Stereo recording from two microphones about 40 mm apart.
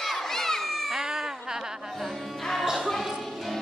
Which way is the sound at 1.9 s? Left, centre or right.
Centre.